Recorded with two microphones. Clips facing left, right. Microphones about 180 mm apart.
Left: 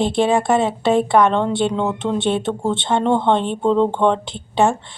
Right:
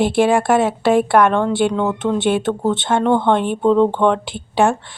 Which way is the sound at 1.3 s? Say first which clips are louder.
Right 1 dB; 25° left (ahead or behind).